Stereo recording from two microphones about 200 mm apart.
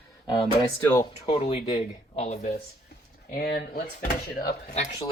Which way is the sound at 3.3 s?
50° left (ahead or behind).